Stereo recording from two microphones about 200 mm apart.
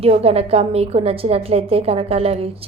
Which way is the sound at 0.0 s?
30° right (ahead or behind).